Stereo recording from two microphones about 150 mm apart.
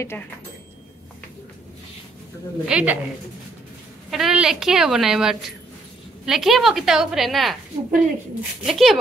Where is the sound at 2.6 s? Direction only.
5° right (ahead or behind).